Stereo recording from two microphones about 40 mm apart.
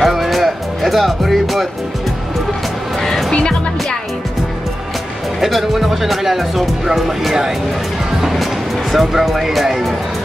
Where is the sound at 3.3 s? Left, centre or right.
Centre.